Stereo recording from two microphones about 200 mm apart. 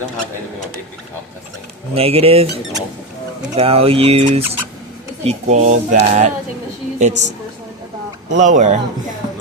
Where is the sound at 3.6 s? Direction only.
30° right (ahead or behind).